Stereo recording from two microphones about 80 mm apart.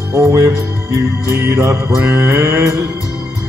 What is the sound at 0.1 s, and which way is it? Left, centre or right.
Music, right.